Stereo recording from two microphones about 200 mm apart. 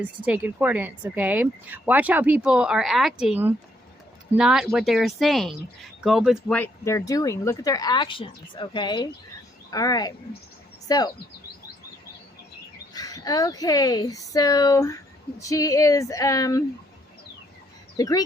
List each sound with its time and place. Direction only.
0.0 s speech: 10° right (ahead or behind)
6.6 s speech: 15° left (ahead or behind)
12.9 s speech: 20° left (ahead or behind)
17.9 s speech: 20° left (ahead or behind)